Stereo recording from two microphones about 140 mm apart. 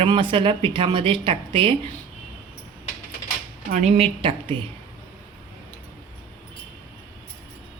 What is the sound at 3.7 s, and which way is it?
Speech, 65° right (ahead or behind).